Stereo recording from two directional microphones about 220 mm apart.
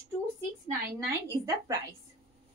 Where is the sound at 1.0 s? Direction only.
15° right (ahead or behind).